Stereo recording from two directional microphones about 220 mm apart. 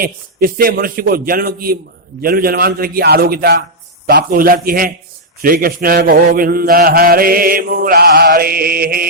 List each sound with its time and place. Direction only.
0.0 s mantra: 40° right (ahead or behind)
2.2 s a man's voice: 45° right (ahead or behind)
4.0 s mantra: 45° right (ahead or behind)